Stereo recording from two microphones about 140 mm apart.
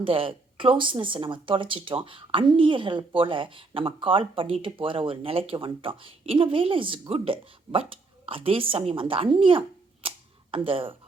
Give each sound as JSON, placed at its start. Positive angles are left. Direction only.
{"t": 0.0, "sound": "speech", "side_deg": -40}